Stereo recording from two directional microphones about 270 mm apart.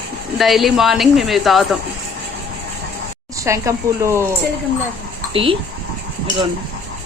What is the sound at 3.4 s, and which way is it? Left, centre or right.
Speech, centre.